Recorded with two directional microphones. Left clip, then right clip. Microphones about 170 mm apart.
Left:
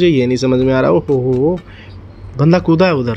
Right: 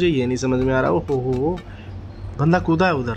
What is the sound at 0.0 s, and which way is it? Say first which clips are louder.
Speech: left 7 dB; 25° left (ahead or behind).